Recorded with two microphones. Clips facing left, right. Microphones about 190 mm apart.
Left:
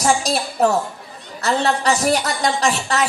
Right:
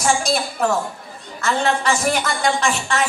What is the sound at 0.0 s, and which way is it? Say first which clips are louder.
A woman's voice: left 1 dB; 35° left (ahead or behind).